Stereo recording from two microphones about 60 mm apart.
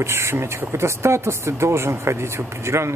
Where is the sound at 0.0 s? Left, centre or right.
Right.